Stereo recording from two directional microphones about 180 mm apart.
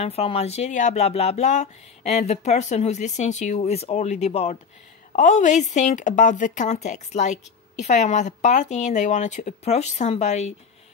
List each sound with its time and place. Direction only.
0.0 s a woman's voice: 35° left (ahead or behind)